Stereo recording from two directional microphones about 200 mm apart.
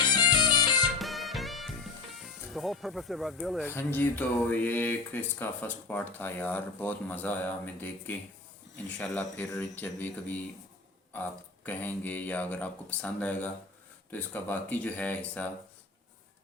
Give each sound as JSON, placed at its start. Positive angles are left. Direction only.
{"t": 0.1, "sound": "music", "side_deg": 20}
{"t": 0.9, "sound": "music", "side_deg": 0}
{"t": 2.5, "sound": "speech", "side_deg": 0}